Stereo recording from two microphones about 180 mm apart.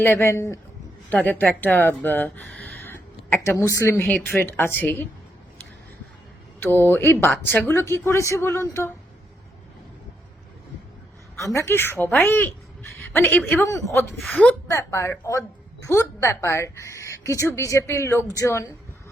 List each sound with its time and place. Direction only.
0.0 s speech: 15° left (ahead or behind)
6.6 s speech: 10° left (ahead or behind)
11.3 s speech: 15° left (ahead or behind)
14.2 s a woman's voice: centre (ahead or behind)
14.7 s a woman's voice: 15° left (ahead or behind)